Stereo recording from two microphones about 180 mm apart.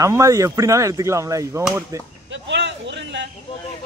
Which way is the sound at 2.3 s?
75° right (ahead or behind).